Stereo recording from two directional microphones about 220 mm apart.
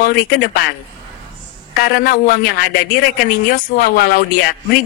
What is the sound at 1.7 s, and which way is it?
Speech, 45° left (ahead or behind).